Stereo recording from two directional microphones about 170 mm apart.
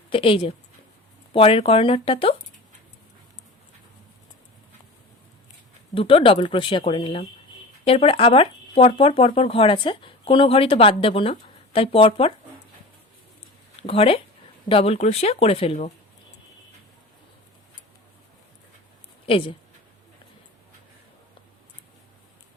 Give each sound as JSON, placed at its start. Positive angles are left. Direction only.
{"t": 0.1, "sound": "speech", "side_deg": 30}
{"t": 5.9, "sound": "speech", "side_deg": 30}
{"t": 13.8, "sound": "speech", "side_deg": 35}
{"t": 19.2, "sound": "speech", "side_deg": 30}